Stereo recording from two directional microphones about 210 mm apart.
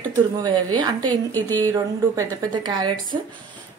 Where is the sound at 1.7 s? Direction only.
15° right (ahead or behind).